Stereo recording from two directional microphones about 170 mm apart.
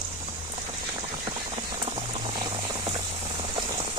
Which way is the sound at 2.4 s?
25° right (ahead or behind).